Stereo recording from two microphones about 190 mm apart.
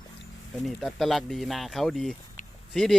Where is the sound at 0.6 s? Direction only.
Centre (ahead or behind).